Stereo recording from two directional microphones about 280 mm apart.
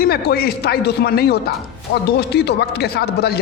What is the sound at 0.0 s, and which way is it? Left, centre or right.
A man's voice, left.